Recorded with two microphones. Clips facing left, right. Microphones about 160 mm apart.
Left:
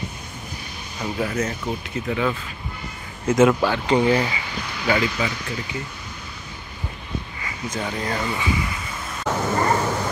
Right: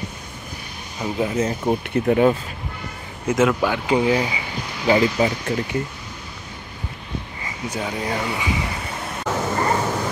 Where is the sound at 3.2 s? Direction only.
5° right (ahead or behind).